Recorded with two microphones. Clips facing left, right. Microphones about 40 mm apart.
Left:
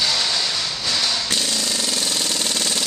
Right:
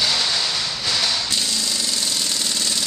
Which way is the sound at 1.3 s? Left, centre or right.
Left.